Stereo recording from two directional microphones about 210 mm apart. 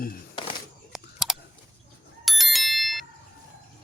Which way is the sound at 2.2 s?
Centre (ahead or behind).